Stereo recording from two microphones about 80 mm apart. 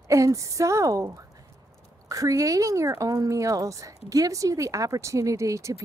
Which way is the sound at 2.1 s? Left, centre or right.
Right.